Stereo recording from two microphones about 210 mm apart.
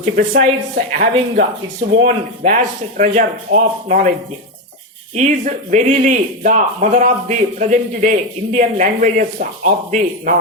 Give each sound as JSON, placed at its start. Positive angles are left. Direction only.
{"t": 0.0, "sound": "a woman's voice", "side_deg": -45}
{"t": 5.1, "sound": "a man's voice", "side_deg": -35}